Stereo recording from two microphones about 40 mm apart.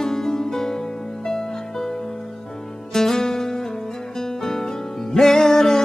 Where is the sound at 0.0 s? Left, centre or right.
Centre.